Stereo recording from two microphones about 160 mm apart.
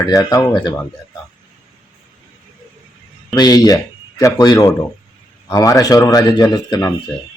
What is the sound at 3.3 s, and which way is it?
Speech, 25° left (ahead or behind).